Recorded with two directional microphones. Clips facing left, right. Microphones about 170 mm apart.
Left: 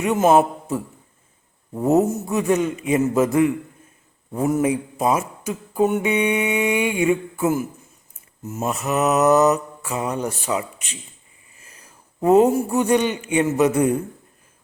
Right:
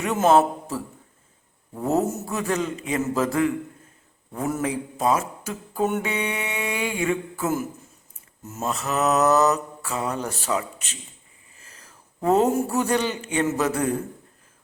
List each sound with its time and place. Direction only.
0.1 s a man's voice: 10° left (ahead or behind)
2.8 s mantra: 20° left (ahead or behind)
4.3 s speech: 15° left (ahead or behind)
8.1 s mantra: 10° left (ahead or behind)
11.6 s a sound: 15° left (ahead or behind)
12.3 s speech: 5° left (ahead or behind)